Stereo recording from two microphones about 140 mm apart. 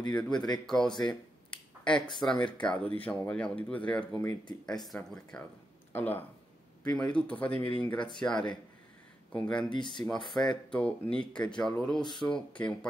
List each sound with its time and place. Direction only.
0.7 s speech: 5° left (ahead or behind)
0.9 s a sound: 30° left (ahead or behind)
1.9 s speech: 5° left (ahead or behind)
9.7 s speech: 35° left (ahead or behind)
9.9 s speech: 5° left (ahead or behind)